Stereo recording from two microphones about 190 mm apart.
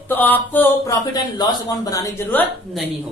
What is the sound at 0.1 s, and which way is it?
Speech, 10° left (ahead or behind).